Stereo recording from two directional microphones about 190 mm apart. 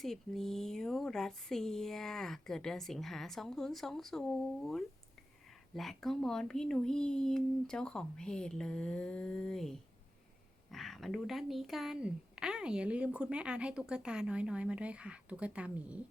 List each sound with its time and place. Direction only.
0.0 s a woman's voice: centre (ahead or behind)